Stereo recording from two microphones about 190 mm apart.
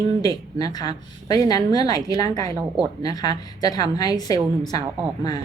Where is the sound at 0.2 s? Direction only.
20° left (ahead or behind).